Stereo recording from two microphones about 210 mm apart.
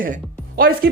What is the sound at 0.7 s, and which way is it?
Speech, 65° right (ahead or behind).